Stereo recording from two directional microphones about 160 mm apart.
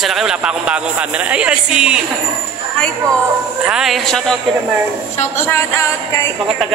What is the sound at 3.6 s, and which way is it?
Speech, 5° right (ahead or behind).